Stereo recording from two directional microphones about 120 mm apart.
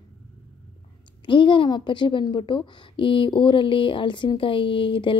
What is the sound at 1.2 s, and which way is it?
A woman's voice, 45° left (ahead or behind).